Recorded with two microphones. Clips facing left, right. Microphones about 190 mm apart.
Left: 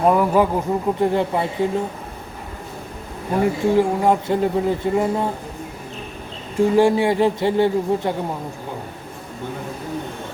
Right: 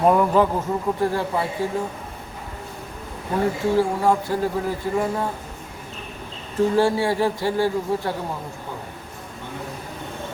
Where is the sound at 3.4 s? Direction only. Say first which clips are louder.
Left 3 dB; 20° left (ahead or behind).